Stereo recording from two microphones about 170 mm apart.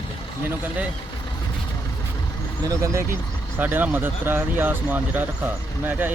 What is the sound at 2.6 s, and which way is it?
Speech, 15° right (ahead or behind).